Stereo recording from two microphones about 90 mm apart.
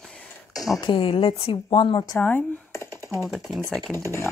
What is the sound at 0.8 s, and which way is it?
Speech, 75° left (ahead or behind).